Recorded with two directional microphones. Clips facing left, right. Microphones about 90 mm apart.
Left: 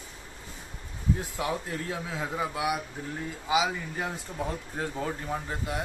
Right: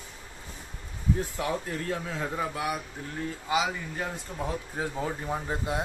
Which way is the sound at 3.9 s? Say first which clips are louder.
Left 1 dB; 5° left (ahead or behind).